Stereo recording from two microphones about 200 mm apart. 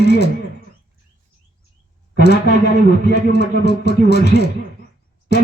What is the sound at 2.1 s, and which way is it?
Speech, 55° left (ahead or behind).